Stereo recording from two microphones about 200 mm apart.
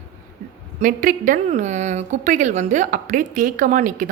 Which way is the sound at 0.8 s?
45° right (ahead or behind).